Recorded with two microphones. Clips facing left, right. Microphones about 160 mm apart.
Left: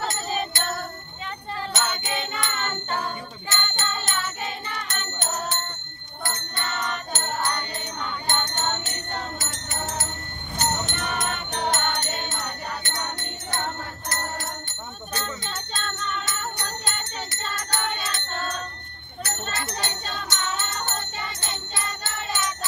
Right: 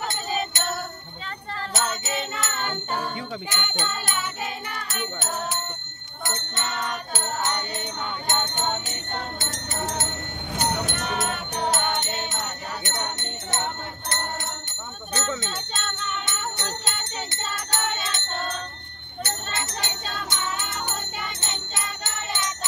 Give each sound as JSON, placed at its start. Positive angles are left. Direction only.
{"t": 1.7, "sound": "music", "side_deg": -5}
{"t": 6.2, "sound": "music", "side_deg": -20}
{"t": 6.8, "sound": "music", "side_deg": -10}
{"t": 7.4, "sound": "music", "side_deg": -20}
{"t": 9.5, "sound": "music", "side_deg": -35}
{"t": 10.9, "sound": "music", "side_deg": -5}
{"t": 15.5, "sound": "jingle bell", "side_deg": -10}
{"t": 16.3, "sound": "jingle bell", "side_deg": -25}
{"t": 17.6, "sound": "music", "side_deg": -20}
{"t": 19.2, "sound": "a sound", "side_deg": -25}
{"t": 20.2, "sound": "music", "side_deg": -10}
{"t": 21.4, "sound": "jingle bell", "side_deg": -20}